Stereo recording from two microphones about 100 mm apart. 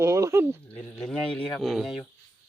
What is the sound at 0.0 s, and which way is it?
Dog, 30° right (ahead or behind).